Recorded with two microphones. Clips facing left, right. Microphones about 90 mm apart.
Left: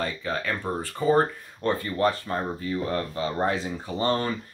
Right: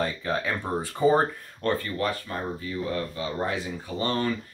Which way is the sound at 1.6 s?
15° left (ahead or behind).